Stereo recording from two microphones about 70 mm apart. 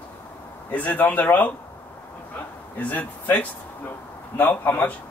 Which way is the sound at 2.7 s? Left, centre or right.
Left.